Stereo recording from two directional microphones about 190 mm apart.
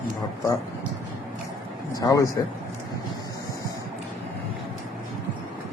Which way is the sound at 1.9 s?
20° left (ahead or behind).